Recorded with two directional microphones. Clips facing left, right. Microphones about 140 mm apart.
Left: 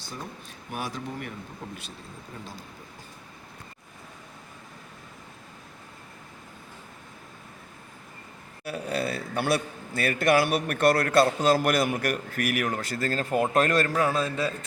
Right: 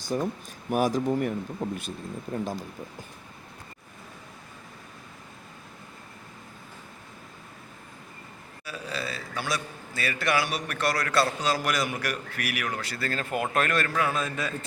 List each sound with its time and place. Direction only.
0.1 s speech: 45° right (ahead or behind)
8.6 s a man's voice: 60° left (ahead or behind); by 14.5 s 30° left (ahead or behind)